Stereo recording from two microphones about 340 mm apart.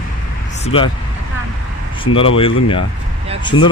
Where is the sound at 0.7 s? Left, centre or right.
Centre.